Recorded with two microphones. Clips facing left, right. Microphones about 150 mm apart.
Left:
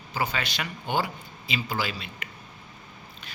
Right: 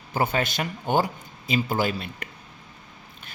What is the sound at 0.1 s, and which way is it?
Speech, 50° right (ahead or behind).